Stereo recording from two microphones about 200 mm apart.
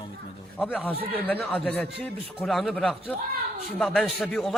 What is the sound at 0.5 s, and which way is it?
A man's voice, 10° left (ahead or behind).